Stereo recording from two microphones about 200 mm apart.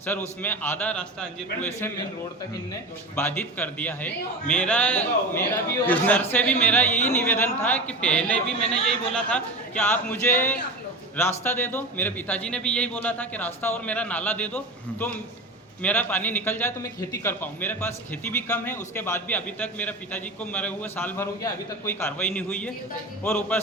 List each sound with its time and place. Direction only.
0.0 s a man's voice: 10° left (ahead or behind)
3.2 s a man's voice: 10° left (ahead or behind)